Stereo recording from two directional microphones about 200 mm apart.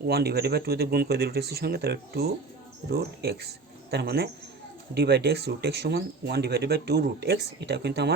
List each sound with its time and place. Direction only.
0.0 s speech: 50° right (ahead or behind)